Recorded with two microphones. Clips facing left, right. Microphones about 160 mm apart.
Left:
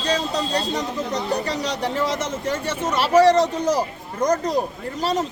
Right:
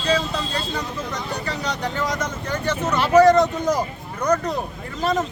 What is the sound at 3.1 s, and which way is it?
Speech, 30° left (ahead or behind).